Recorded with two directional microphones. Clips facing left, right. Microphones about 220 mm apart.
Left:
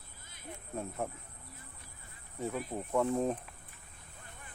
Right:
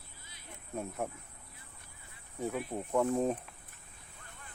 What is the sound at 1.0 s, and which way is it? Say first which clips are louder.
Speech: even; 5° right (ahead or behind).